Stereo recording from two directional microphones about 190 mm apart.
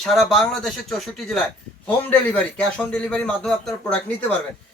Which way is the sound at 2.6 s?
5° left (ahead or behind).